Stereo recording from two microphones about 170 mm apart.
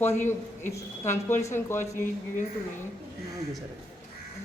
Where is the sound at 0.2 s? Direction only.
45° left (ahead or behind).